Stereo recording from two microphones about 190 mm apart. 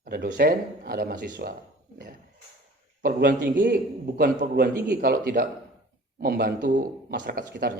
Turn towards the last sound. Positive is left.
turn(degrees=-50)  # may be behind; listen again after turning